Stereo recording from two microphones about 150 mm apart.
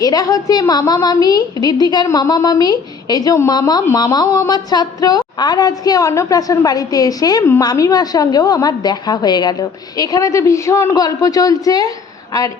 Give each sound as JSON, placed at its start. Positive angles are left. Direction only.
{"t": 0.0, "sound": "a woman's voice", "side_deg": 25}